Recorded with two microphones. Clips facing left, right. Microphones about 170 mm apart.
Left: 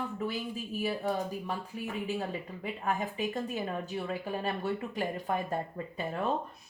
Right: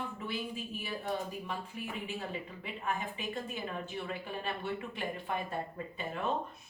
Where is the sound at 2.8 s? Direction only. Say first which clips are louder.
Left 5 dB; 40° left (ahead or behind).